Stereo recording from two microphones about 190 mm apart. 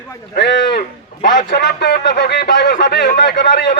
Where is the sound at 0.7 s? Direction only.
50° left (ahead or behind).